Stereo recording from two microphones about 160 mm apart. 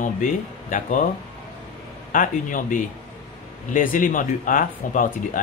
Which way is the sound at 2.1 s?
55° left (ahead or behind).